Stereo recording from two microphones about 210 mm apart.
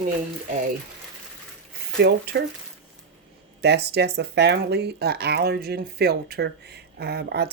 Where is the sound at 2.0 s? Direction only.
50° right (ahead or behind).